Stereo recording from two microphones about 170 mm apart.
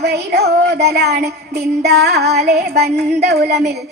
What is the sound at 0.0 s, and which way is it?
Child singing, 75° right (ahead or behind).